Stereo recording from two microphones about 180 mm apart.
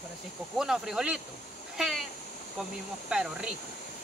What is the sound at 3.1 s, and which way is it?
Speech, 5° right (ahead or behind).